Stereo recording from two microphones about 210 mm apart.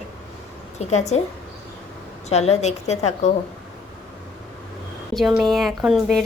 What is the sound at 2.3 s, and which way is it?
A woman's voice, 30° left (ahead or behind).